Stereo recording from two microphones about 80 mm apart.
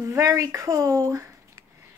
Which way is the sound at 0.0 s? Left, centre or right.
Right.